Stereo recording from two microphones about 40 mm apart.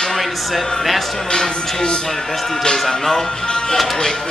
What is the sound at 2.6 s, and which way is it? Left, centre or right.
Speech, centre.